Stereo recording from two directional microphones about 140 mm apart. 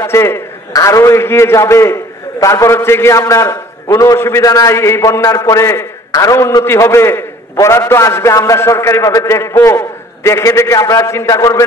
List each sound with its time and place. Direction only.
0.0 s a man's voice: 15° left (ahead or behind)